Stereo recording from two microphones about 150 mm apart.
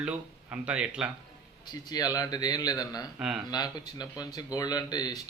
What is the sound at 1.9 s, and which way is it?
Speech, 25° left (ahead or behind).